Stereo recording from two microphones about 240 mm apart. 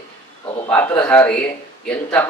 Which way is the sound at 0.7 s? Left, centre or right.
Centre.